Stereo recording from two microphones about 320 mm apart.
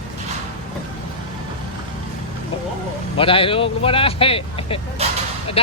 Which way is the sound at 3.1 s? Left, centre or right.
Centre.